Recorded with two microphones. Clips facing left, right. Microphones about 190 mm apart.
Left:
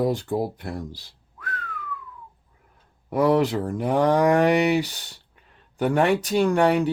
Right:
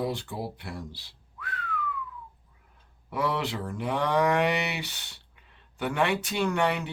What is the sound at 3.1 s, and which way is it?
Speech, 40° left (ahead or behind).